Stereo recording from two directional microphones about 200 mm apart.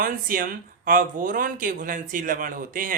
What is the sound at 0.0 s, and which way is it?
Speech, 45° right (ahead or behind).